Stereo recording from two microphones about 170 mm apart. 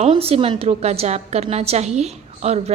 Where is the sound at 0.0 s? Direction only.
35° right (ahead or behind).